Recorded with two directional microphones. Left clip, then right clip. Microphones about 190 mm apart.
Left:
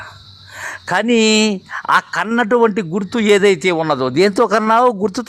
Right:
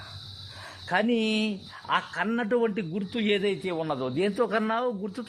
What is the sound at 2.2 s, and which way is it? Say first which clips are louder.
A man's voice: left 12 dB; 30° left (ahead or behind).